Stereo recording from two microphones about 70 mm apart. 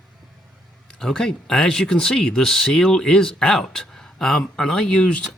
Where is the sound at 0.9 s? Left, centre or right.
Centre.